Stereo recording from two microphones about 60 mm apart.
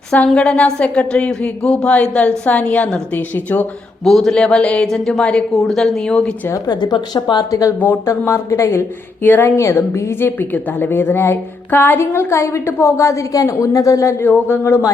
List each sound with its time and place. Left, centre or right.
0.1 s a woman's voice: left
4.0 s a man's voice: centre
4.9 s a man's voice: centre
7.1 s speech: left
8.0 s speech: left
8.4 s a woman's voice: left
9.2 s speech: left
9.6 s a woman's voice: left
14.3 s speech: left